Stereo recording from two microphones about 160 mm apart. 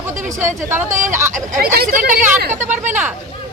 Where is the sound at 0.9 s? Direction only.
50° right (ahead or behind).